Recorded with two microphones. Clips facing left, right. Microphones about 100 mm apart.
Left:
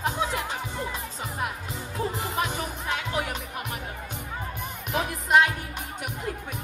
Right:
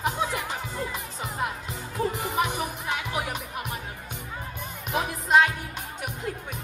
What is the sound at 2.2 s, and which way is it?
Music, 15° right (ahead or behind).